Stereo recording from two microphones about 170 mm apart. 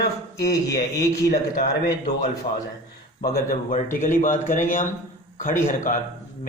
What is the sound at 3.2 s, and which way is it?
A man's voice, 60° left (ahead or behind).